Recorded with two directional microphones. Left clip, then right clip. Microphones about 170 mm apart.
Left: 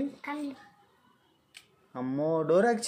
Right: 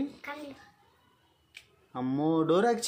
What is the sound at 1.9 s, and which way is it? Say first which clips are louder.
Speech: even; 15° right (ahead or behind).